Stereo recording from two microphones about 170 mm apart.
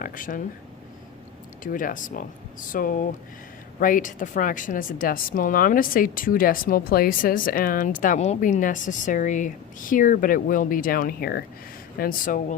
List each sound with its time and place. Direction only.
0.0 s speech: 50° left (ahead or behind)
1.6 s a woman's voice: 50° left (ahead or behind)